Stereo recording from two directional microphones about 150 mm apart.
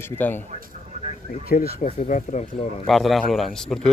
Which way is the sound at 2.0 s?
50° left (ahead or behind).